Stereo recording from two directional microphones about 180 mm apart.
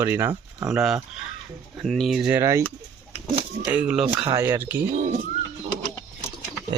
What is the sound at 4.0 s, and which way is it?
Speech, 30° right (ahead or behind).